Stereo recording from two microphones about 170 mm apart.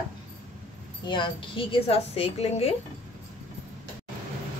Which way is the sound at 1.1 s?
30° left (ahead or behind).